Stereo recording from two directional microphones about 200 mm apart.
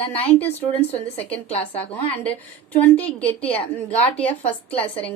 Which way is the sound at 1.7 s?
10° left (ahead or behind).